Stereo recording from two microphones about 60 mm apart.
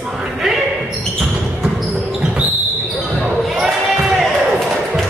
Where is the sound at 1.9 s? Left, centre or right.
Centre.